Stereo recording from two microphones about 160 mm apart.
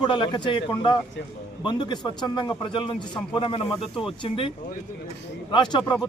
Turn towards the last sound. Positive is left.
turn(degrees=30)  # may be behind; listen again after turning